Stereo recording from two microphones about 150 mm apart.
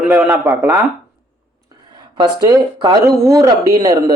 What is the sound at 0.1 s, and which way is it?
Speech, 10° right (ahead or behind).